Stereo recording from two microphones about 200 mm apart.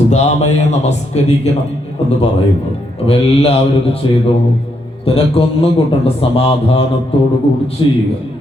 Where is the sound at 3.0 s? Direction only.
30° left (ahead or behind).